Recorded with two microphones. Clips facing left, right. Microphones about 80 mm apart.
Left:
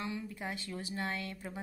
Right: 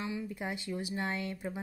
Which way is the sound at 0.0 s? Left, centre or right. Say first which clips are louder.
Right 2 dB; centre.